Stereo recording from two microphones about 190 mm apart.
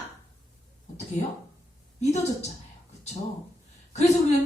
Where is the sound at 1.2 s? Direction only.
35° left (ahead or behind).